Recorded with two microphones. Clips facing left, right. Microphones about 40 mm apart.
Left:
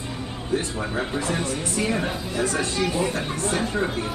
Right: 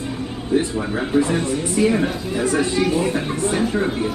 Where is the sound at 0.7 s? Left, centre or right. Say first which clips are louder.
Right 6 dB; centre.